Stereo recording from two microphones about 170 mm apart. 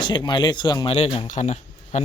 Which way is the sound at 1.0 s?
40° left (ahead or behind).